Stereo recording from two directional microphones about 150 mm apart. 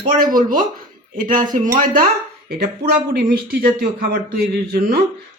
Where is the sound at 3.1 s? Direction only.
85° right.